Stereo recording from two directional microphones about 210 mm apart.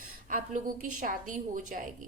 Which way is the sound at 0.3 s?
40° right (ahead or behind).